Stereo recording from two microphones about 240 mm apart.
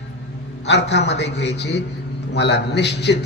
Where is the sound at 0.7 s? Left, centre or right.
Left.